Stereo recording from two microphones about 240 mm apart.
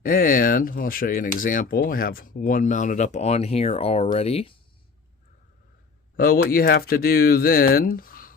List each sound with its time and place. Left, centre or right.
0.0 s speech: left
6.1 s speech: left